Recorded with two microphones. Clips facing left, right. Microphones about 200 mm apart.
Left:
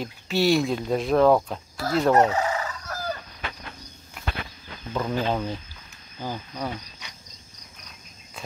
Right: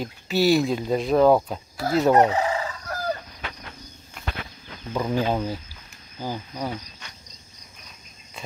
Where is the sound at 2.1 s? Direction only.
15° right (ahead or behind).